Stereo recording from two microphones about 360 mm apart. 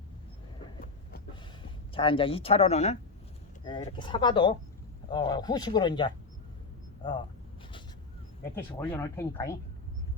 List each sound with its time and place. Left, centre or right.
1.9 s speech: centre
8.5 s speech: centre